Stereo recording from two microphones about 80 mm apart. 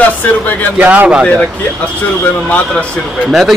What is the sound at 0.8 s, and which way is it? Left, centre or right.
Speech, centre.